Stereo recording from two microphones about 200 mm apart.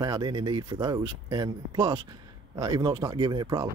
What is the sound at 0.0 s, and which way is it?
Speech, 20° right (ahead or behind).